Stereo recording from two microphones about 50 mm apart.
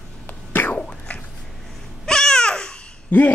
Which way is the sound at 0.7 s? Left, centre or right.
Left.